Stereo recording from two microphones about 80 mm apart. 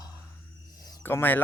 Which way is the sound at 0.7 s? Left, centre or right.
Left.